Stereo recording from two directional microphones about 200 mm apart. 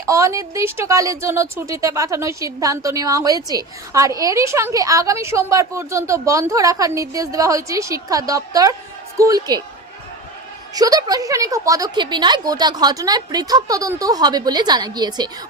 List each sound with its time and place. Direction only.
0.0 s speech: 15° right (ahead or behind)
10.8 s a woman's voice: 20° right (ahead or behind)